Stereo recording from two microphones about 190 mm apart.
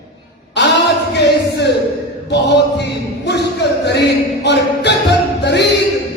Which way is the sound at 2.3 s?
60° left (ahead or behind).